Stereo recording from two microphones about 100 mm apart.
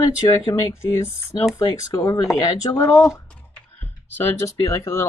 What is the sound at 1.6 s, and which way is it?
Speech, 40° left (ahead or behind).